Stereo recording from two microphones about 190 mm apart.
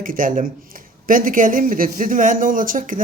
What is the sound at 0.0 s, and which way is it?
Speech, 45° right (ahead or behind).